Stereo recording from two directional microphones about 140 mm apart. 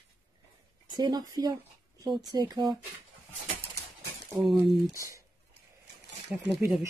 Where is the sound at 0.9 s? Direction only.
30° right (ahead or behind).